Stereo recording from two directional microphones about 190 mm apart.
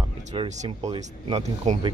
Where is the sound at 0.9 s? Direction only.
30° right (ahead or behind).